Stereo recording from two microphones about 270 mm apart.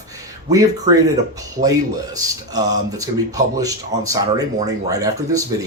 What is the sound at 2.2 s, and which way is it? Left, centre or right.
Speech, centre.